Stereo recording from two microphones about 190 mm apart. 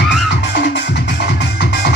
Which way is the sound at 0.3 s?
60° left (ahead or behind).